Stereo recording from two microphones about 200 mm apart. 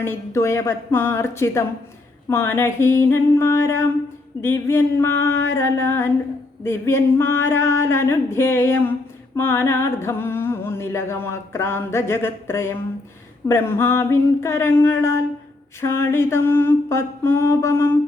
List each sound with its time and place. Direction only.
0.0 s music: 10° left (ahead or behind)